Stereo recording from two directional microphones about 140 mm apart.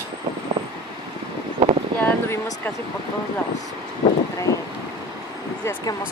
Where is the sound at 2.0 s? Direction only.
15° left (ahead or behind).